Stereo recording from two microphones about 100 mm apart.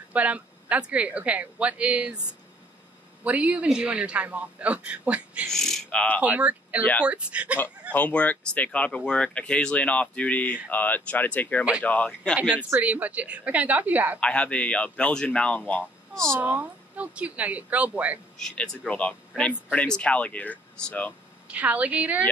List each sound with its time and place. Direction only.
0.1 s a man's voice: 15° right (ahead or behind)
3.3 s a man's voice: 15° right (ahead or behind)
5.5 s speech: 5° left (ahead or behind)
6.2 s speech: 15° right (ahead or behind)
6.8 s speech: 20° left (ahead or behind)
7.1 s a man's voice: 10° right (ahead or behind)
7.9 s speech: 15° left (ahead or behind)
12.4 s a man's voice: 10° right (ahead or behind)
14.2 s speech: 10° left (ahead or behind)
16.3 s a man's voice: 20° right (ahead or behind)
18.4 s speech: 10° left (ahead or behind)
21.5 s a man's voice: 15° right (ahead or behind)